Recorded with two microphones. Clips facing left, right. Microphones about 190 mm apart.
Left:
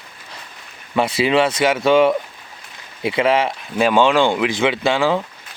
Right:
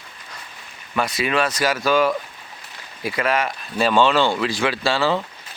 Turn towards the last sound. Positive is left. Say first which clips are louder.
# left 3 dB
turn(degrees=15)  # may be behind; listen again after turning